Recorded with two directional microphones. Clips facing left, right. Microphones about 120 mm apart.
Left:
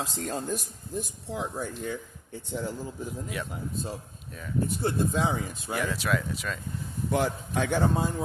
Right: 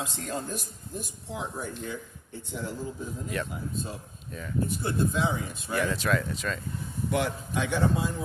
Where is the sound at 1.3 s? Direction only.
50° left (ahead or behind).